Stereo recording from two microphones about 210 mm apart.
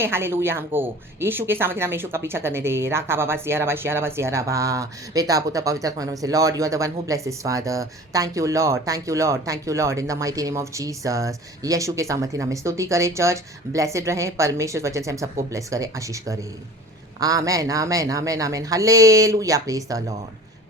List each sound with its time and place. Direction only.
0.0 s speech: 10° right (ahead or behind)